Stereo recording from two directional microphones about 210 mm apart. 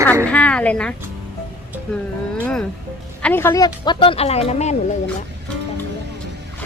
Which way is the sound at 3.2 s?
10° left (ahead or behind).